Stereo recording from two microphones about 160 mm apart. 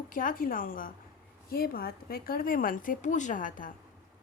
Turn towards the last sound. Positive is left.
turn(degrees=55)  # may be behind; listen again after turning